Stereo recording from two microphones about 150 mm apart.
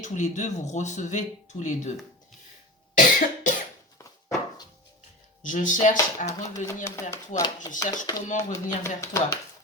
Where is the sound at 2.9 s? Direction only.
60° left (ahead or behind).